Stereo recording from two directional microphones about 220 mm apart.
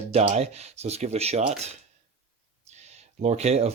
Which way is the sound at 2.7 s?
30° right (ahead or behind).